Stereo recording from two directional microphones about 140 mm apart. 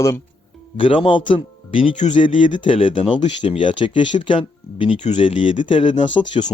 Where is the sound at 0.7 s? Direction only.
40° left (ahead or behind).